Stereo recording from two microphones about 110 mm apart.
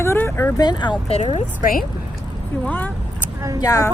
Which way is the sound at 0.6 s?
40° left (ahead or behind).